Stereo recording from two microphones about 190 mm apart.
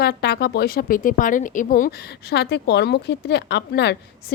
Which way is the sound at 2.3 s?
65° left (ahead or behind).